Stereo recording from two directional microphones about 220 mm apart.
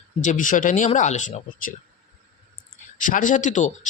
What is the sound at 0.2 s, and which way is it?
Speech, 35° left (ahead or behind).